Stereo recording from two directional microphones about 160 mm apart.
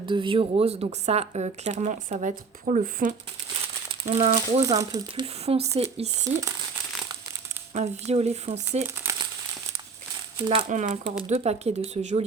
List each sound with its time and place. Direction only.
0.0 s speech: 30° right (ahead or behind); by 3.2 s 55° right (ahead or behind)
4.1 s speech: 40° right (ahead or behind)
4.6 s speech: 20° right (ahead or behind)
5.2 s speech: 40° right (ahead or behind)
7.7 s speech: 45° right (ahead or behind)
10.6 s speech: 50° right (ahead or behind)